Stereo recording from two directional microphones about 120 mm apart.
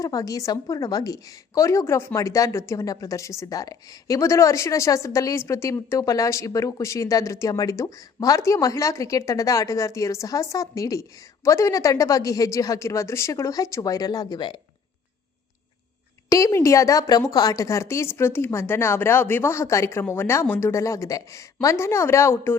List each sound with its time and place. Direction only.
0.0 s a woman's voice: 30° left (ahead or behind)
16.3 s a woman's voice: 30° left (ahead or behind)